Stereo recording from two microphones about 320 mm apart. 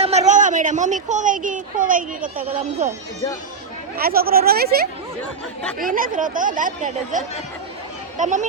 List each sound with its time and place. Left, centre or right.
0.0 s a sound: right
1.0 s speech: right
3.9 s speech: right